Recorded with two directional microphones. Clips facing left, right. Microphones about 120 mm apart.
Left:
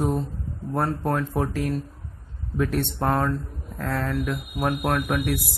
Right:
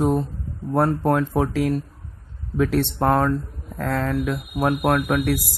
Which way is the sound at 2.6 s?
90° right.